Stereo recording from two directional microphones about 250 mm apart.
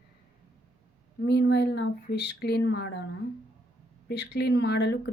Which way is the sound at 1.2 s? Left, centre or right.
Left.